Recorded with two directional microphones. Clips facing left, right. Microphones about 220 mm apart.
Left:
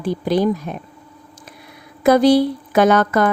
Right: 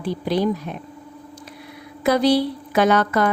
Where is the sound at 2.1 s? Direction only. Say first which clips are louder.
Left 5 dB; 50° left (ahead or behind).